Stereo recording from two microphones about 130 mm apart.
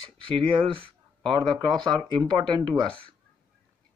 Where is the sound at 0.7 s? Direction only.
40° right (ahead or behind).